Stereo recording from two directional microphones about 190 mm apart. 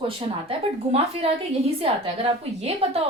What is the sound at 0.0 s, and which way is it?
A woman's voice, 30° right (ahead or behind).